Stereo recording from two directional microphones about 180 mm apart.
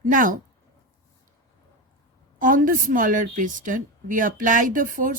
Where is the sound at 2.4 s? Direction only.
50° right (ahead or behind).